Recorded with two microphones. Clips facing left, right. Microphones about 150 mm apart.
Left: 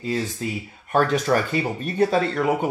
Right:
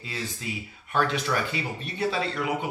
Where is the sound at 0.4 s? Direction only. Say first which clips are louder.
Left 7 dB; 45° left (ahead or behind).